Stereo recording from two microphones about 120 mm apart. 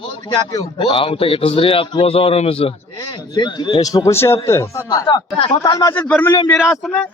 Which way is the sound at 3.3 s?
40° left (ahead or behind).